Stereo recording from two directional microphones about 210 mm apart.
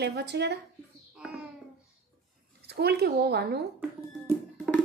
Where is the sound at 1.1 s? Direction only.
5° right (ahead or behind).